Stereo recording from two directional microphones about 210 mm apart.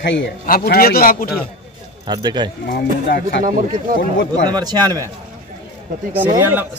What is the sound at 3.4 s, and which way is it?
Speech, 40° right (ahead or behind).